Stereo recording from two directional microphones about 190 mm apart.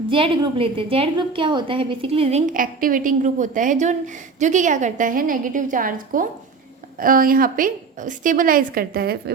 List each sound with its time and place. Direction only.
0.1 s a woman's voice: 30° right (ahead or behind); by 9.3 s 55° right (ahead or behind)